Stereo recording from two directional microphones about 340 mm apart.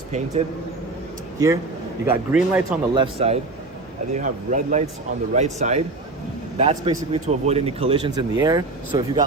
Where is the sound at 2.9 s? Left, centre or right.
Centre.